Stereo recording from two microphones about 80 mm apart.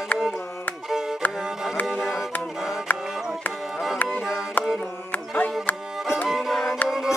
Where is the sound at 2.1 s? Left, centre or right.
Left.